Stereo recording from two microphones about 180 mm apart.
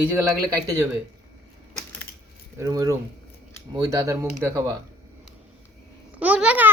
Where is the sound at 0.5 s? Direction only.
20° right (ahead or behind).